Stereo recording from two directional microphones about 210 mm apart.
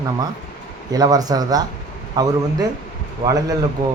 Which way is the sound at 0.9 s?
15° right (ahead or behind).